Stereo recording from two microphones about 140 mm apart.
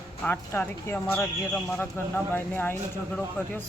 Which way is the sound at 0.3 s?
15° left (ahead or behind).